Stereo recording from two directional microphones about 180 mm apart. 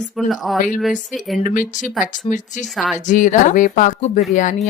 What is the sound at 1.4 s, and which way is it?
Speech, 45° left (ahead or behind).